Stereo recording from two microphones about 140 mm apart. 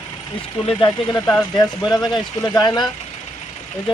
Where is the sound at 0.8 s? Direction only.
30° left (ahead or behind).